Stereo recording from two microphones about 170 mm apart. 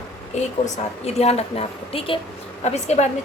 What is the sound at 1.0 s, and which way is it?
A woman's voice, 40° left (ahead or behind).